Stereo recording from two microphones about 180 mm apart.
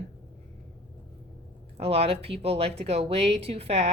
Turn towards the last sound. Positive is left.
turn(degrees=-35)  # may be behind; listen again after turning